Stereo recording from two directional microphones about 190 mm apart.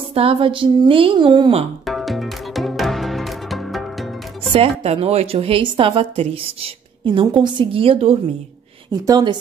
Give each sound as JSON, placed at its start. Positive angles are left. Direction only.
{"t": 0.1, "sound": "a woman's voice", "side_deg": -30}
{"t": 1.9, "sound": "music", "side_deg": 0}
{"t": 4.5, "sound": "a woman's voice", "side_deg": -30}